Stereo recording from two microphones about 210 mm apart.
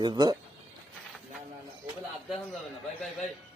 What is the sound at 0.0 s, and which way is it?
Speech, 20° right (ahead or behind).